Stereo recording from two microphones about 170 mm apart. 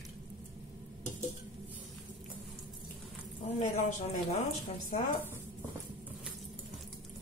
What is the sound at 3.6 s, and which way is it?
Speech, 40° left (ahead or behind).